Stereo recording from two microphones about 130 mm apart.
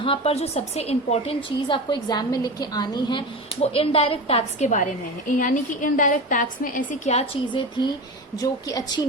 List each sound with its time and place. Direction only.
0.0 s a woman's voice: 45° left (ahead or behind)
3.6 s a woman's voice: 50° left (ahead or behind)
5.4 s a woman's voice: 90° left; by 7.3 s 60° left (ahead or behind)
8.4 s a woman's voice: 30° left (ahead or behind)